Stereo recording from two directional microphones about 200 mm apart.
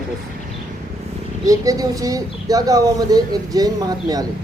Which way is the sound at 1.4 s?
15° right (ahead or behind).